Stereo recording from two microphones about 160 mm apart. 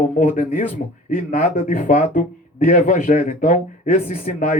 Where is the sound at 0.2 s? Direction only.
60° left (ahead or behind).